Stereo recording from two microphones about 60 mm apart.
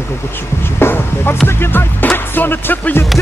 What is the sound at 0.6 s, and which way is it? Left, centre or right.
Music, left.